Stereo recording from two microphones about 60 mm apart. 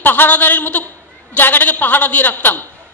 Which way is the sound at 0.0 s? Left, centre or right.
Left.